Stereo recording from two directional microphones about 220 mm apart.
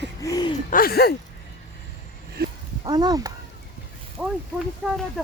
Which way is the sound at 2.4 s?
45° right (ahead or behind).